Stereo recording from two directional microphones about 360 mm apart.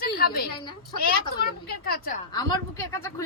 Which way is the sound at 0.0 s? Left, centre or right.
Left.